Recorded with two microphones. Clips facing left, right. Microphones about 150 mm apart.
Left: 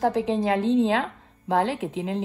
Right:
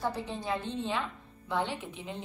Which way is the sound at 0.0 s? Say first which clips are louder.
Left 12 dB; 90° left.